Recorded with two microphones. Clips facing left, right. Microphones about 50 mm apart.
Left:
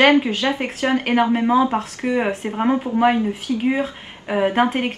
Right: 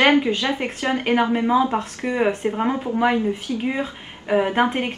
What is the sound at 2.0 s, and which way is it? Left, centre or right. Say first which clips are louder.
Speech: even; centre.